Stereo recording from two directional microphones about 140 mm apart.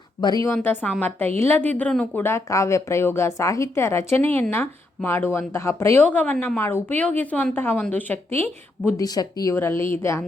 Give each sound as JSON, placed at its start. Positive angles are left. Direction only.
{"t": 0.2, "sound": "speech", "side_deg": 30}
{"t": 0.5, "sound": "speech", "side_deg": 15}
{"t": 8.9, "sound": "speech", "side_deg": 25}